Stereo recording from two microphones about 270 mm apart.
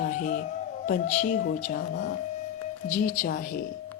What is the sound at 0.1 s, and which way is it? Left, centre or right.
Speech, left.